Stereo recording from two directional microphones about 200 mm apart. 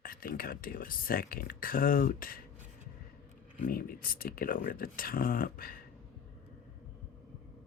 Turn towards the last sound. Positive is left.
turn(degrees=45)  # may be behind; listen again after turning